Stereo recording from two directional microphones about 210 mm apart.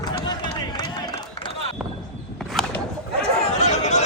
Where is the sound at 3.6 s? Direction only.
30° left (ahead or behind).